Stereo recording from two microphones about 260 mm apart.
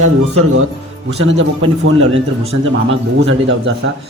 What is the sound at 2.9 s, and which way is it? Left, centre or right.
Speech, right.